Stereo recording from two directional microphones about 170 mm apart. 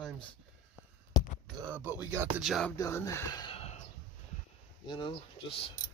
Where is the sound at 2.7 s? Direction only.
20° left (ahead or behind).